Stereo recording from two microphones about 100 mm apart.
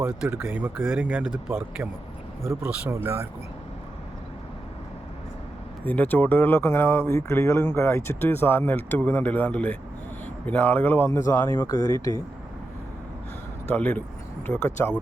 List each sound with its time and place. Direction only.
0.3 s speech: 20° right (ahead or behind)
5.8 s speech: 15° left (ahead or behind)
13.7 s speech: 20° left (ahead or behind)
14.5 s speech: 5° left (ahead or behind)